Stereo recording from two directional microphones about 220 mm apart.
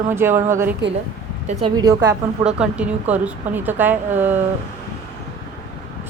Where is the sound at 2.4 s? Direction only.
5° right (ahead or behind).